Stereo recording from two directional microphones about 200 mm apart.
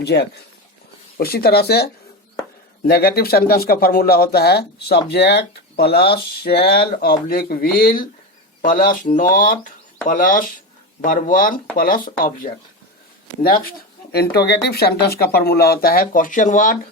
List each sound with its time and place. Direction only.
0.0 s speech: 55° left (ahead or behind)
14.1 s speech: 50° left (ahead or behind)